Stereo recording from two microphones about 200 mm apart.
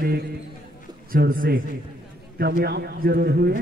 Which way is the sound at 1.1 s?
45° right (ahead or behind).